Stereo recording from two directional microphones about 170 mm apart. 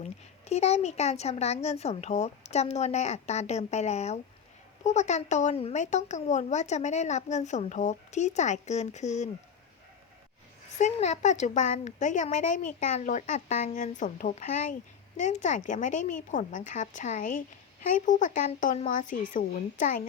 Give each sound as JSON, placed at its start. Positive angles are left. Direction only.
{"t": 0.0, "sound": "speech", "side_deg": 40}
{"t": 10.8, "sound": "speech", "side_deg": 45}